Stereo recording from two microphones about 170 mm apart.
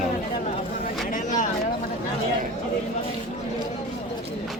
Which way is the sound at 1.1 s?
50° left (ahead or behind).